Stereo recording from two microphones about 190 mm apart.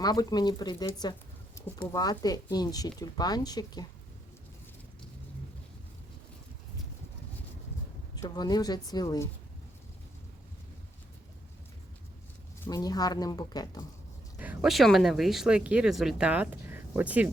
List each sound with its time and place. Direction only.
0.0 s speech: 20° left (ahead or behind)
8.1 s speech: 20° left (ahead or behind)
12.6 s speech: 20° left (ahead or behind)
14.3 s speech: 5° right (ahead or behind)